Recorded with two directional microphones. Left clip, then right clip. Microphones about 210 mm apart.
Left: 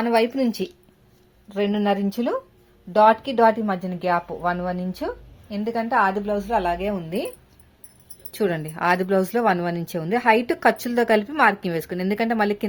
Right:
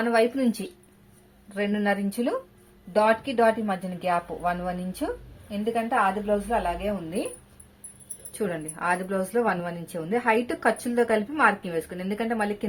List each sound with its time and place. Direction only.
0.0 s a woman's voice: 45° left (ahead or behind)
8.3 s a woman's voice: 45° left (ahead or behind)